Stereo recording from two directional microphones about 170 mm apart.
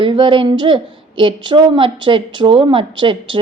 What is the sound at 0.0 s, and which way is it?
A woman's voice, 30° right (ahead or behind).